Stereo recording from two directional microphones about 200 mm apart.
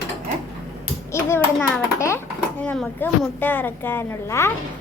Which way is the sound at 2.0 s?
15° left (ahead or behind).